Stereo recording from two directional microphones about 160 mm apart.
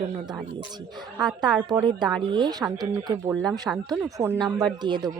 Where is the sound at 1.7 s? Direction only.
25° right (ahead or behind).